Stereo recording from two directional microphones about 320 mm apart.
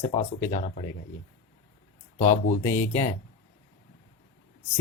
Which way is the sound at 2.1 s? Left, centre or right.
Left.